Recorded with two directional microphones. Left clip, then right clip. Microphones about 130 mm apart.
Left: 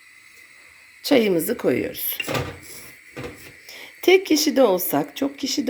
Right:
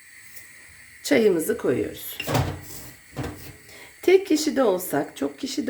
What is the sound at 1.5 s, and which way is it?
Speech, 35° left (ahead or behind).